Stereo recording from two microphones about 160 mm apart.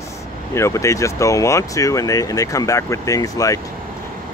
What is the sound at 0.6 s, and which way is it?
Speech, 20° left (ahead or behind).